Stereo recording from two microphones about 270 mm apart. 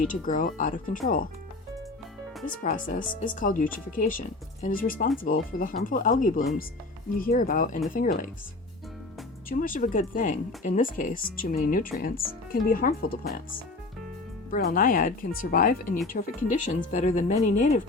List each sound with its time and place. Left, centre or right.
0.0 s speech: left
2.6 s speech: left
9.5 s speech: left
14.5 s speech: left